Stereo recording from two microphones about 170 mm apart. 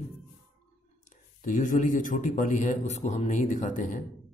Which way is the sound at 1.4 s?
50° left (ahead or behind).